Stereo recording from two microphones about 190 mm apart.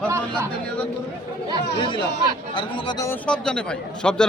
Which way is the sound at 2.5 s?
25° left (ahead or behind).